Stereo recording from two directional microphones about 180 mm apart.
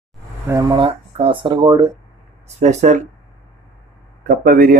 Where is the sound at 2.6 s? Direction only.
40° right (ahead or behind).